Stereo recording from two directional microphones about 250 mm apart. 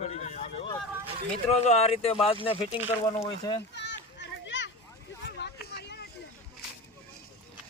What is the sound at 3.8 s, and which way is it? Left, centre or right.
Children playing, left.